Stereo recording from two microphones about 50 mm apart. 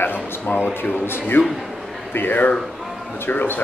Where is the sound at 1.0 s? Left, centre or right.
Left.